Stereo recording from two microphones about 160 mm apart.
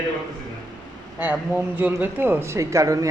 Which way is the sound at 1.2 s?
10° right (ahead or behind).